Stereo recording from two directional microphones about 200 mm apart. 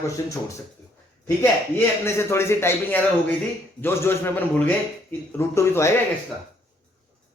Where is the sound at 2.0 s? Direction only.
15° left (ahead or behind).